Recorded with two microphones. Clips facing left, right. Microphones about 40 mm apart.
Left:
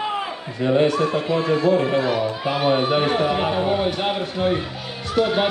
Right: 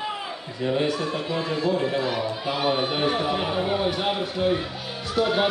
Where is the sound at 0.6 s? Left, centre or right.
Left.